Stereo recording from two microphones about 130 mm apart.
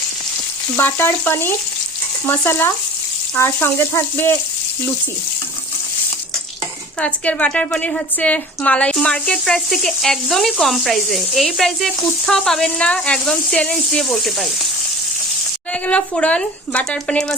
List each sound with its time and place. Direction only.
0.8 s speech: 15° left (ahead or behind)
7.0 s speech: 10° left (ahead or behind)
15.7 s speech: 10° left (ahead or behind)